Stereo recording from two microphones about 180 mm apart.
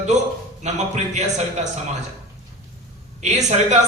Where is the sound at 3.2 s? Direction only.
40° right (ahead or behind).